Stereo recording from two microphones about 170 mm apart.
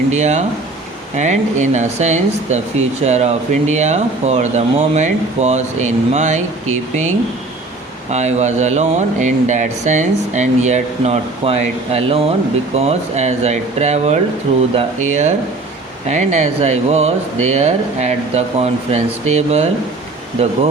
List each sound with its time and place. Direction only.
0.1 s speech: 40° right (ahead or behind)
8.1 s speech: 40° right (ahead or behind)